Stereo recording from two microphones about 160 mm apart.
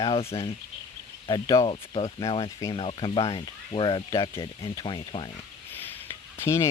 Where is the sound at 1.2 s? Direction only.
25° left (ahead or behind).